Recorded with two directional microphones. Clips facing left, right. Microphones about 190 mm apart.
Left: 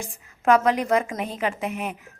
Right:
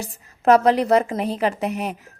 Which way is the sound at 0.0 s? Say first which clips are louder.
Right 4 dB; 35° right (ahead or behind).